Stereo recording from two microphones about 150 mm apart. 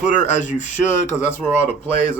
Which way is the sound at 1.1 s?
15° left (ahead or behind).